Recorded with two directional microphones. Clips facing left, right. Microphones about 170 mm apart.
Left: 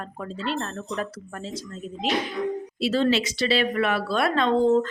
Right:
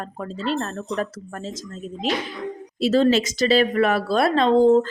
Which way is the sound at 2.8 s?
40° right (ahead or behind).